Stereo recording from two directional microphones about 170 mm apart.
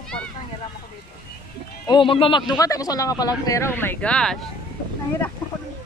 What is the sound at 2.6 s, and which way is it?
Speech, 20° left (ahead or behind).